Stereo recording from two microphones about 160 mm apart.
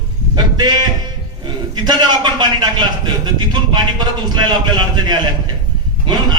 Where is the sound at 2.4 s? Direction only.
30° right (ahead or behind).